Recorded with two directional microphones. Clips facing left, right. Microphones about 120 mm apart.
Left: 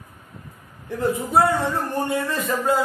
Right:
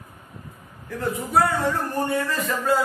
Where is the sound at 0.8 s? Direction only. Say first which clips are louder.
Left 4 dB; 20° left (ahead or behind).